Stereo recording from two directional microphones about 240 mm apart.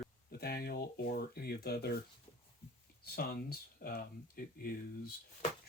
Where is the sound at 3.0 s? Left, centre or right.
Left.